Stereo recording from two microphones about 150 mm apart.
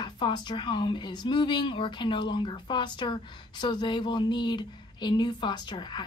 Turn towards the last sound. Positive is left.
turn(degrees=30)  # may be behind; listen again after turning